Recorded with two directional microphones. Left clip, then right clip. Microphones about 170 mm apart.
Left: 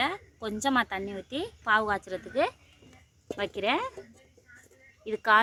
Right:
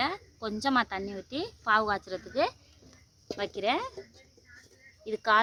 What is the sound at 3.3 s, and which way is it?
Speech, 20° left (ahead or behind).